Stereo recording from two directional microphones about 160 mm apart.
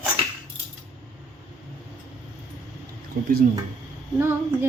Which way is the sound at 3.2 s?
65° right (ahead or behind).